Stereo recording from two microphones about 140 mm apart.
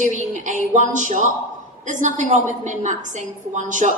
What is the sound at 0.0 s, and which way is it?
A woman's voice, 60° right (ahead or behind).